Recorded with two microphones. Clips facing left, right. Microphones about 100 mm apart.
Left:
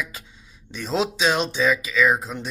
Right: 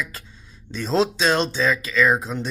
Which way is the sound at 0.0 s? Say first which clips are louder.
Right 1 dB; 15° left (ahead or behind).